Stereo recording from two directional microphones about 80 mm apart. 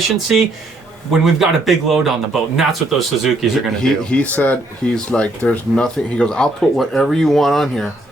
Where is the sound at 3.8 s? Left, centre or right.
Centre.